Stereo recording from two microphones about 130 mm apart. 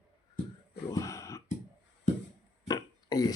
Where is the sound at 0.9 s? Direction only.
25° left (ahead or behind).